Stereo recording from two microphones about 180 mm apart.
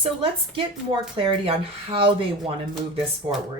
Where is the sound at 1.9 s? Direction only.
30° right (ahead or behind).